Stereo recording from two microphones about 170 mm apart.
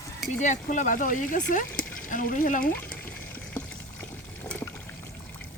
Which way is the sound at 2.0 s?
55° left (ahead or behind).